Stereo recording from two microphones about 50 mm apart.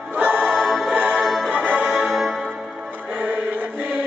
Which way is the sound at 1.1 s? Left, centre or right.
Centre.